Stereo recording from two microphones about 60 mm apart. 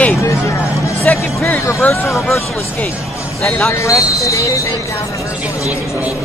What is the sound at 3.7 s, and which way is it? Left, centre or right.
Speech, left.